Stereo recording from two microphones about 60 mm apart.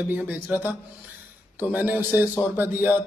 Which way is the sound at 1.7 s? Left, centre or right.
Right.